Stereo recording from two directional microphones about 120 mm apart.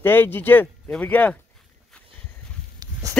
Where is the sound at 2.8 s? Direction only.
35° right (ahead or behind).